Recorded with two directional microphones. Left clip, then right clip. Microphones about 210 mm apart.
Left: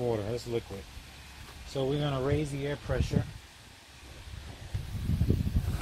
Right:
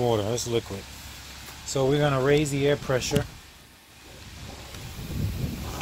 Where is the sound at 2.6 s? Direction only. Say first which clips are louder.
Right 10 dB; 50° right (ahead or behind).